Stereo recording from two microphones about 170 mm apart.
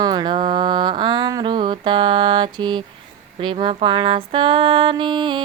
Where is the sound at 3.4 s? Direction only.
30° right (ahead or behind).